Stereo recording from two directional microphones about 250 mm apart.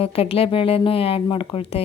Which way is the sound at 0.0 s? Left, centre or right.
Left.